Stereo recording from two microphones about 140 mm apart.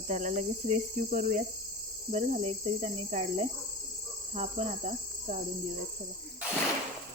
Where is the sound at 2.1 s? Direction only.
50° right (ahead or behind).